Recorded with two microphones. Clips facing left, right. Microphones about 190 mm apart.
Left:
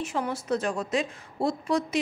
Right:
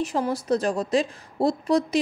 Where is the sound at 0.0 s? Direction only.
35° right (ahead or behind).